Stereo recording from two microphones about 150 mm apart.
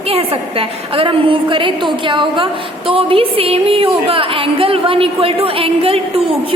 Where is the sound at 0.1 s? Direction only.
40° right (ahead or behind).